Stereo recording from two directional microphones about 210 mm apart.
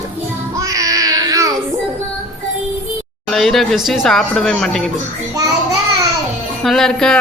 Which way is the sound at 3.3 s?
Centre (ahead or behind).